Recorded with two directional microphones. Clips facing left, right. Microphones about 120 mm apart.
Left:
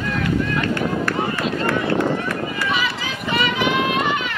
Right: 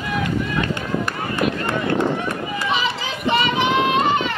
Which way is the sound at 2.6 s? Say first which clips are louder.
Right 1 dB; 25° right (ahead or behind).